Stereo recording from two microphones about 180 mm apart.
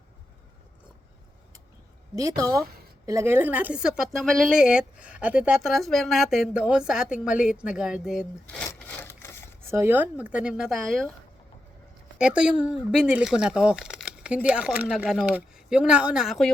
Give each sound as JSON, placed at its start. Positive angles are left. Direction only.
{"t": 2.1, "sound": "a woman's voice", "side_deg": -20}
{"t": 8.5, "sound": "wood", "side_deg": 15}
{"t": 9.6, "sound": "speech", "side_deg": -15}
{"t": 12.1, "sound": "speech", "side_deg": -5}